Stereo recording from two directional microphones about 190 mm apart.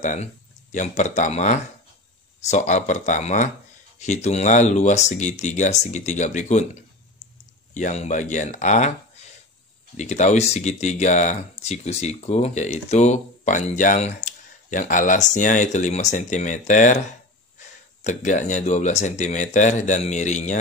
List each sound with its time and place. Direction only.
0.0 s speech: 40° left (ahead or behind)
18.0 s speech: 40° left (ahead or behind)